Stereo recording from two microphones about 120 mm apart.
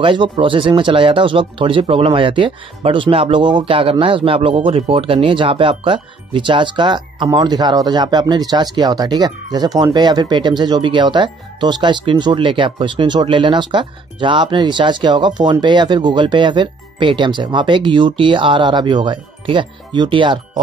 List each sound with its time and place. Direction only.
0.0 s speech: 45° right (ahead or behind)